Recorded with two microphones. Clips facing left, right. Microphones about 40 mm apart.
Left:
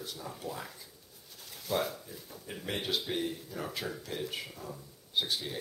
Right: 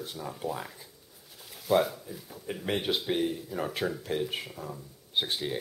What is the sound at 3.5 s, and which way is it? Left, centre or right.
Speech, right.